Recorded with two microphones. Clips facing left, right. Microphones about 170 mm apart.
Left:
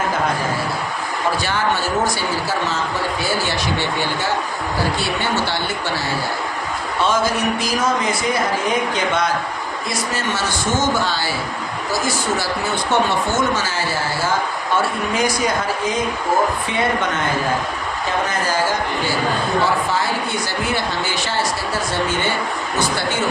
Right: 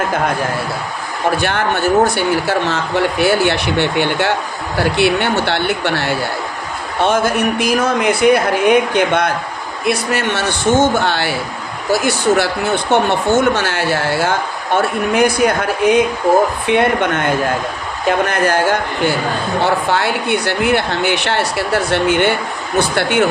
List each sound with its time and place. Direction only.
1.4 s speech: 60° right (ahead or behind)